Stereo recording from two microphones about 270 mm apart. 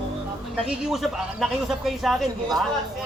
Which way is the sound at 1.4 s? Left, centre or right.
Centre.